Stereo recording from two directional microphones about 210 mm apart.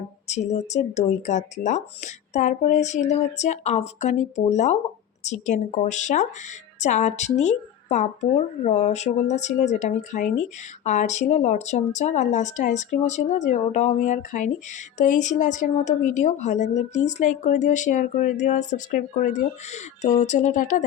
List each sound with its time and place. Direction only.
0.3 s speech: 30° left (ahead or behind)